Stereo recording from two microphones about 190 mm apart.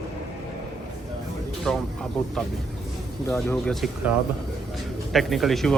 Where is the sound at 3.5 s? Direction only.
5° left (ahead or behind).